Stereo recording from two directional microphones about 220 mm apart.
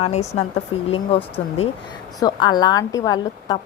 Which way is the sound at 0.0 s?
30° left (ahead or behind).